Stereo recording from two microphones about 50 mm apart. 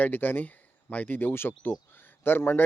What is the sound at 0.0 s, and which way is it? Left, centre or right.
Speech, left.